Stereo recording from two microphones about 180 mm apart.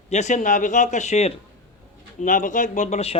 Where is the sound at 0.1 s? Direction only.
40° left (ahead or behind).